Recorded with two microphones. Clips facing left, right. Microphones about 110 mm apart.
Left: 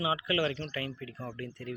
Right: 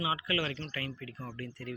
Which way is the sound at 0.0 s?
25° left (ahead or behind).